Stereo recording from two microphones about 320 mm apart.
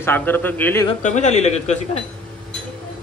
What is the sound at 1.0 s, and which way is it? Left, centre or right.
Speech, left.